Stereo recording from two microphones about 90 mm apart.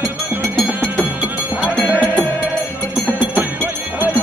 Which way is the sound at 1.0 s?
15° right (ahead or behind).